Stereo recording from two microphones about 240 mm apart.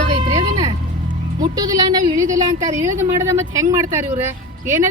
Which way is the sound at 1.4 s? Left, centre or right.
Centre.